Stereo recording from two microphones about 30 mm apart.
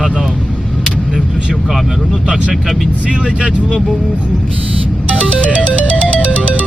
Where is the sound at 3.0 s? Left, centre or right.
Right.